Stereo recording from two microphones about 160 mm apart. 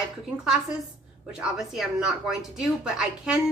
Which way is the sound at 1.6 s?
Centre (ahead or behind).